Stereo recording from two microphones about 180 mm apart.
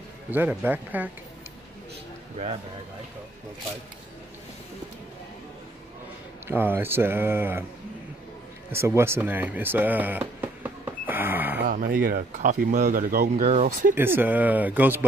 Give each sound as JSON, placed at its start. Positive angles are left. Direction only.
{"t": 0.3, "sound": "speech", "side_deg": -10}
{"t": 6.4, "sound": "speech", "side_deg": -10}
{"t": 8.7, "sound": "speech", "side_deg": -15}
{"t": 11.6, "sound": "speech", "side_deg": -50}
{"t": 13.5, "sound": "speech", "side_deg": -40}
{"t": 13.9, "sound": "speech", "side_deg": -10}